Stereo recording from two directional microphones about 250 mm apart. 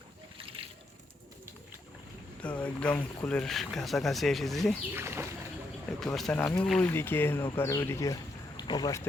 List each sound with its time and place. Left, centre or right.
0.3 s splash: right
2.4 s speech: centre
4.9 s speech: centre
6.0 s speech: centre